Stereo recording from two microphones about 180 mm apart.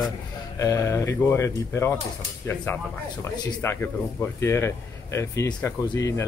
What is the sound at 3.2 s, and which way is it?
Speech, 15° left (ahead or behind).